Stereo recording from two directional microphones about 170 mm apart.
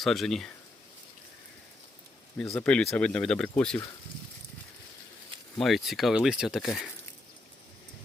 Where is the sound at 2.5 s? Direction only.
10° left (ahead or behind).